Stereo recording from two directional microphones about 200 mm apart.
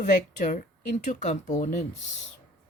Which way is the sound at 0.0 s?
40° left (ahead or behind).